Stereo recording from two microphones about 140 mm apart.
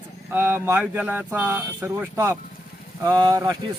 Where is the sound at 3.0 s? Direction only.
30° right (ahead or behind).